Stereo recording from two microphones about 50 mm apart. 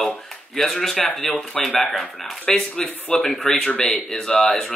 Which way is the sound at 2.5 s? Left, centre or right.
Left.